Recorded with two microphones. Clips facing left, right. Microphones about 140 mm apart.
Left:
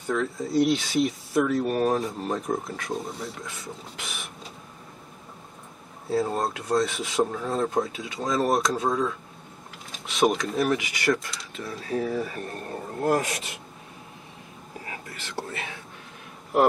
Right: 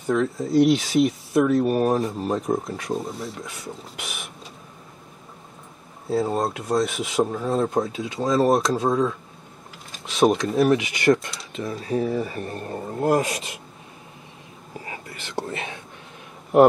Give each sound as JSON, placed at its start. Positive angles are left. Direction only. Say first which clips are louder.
{"t": 0.0, "sound": "speech", "louder": "right 5 dB", "side_deg": 0}
{"t": 6.0, "sound": "speech", "louder": "right 3 dB", "side_deg": 0}
{"t": 9.9, "sound": "a sound", "louder": "right 4 dB", "side_deg": 0}
{"t": 10.4, "sound": "speech", "louder": "right 6 dB", "side_deg": 0}
{"t": 11.9, "sound": "speech", "louder": "right 3 dB", "side_deg": -15}
{"t": 14.9, "sound": "whispering", "louder": "even", "side_deg": -20}